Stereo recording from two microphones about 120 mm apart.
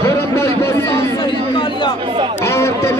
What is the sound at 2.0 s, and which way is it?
Speech, 45° right (ahead or behind).